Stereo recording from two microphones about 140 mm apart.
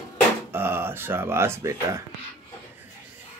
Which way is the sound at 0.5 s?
15° right (ahead or behind).